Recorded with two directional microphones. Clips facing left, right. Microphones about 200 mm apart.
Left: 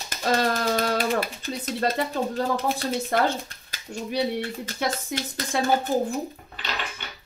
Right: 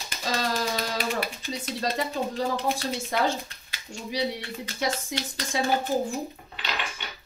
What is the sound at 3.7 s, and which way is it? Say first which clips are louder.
Speech: left 4 dB; 50° left (ahead or behind).